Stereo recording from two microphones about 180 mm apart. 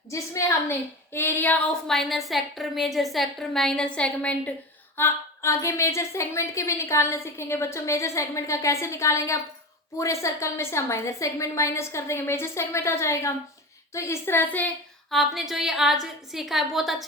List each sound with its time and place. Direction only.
1.1 s a woman's voice: 10° left (ahead or behind)
15.1 s a woman's voice: centre (ahead or behind)